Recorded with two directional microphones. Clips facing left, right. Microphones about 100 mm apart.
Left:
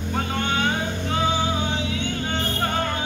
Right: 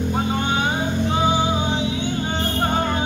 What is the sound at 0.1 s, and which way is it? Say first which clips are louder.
Music: even; 15° right (ahead or behind).